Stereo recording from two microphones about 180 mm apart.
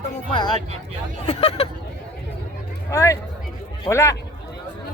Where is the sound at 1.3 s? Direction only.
35° left (ahead or behind).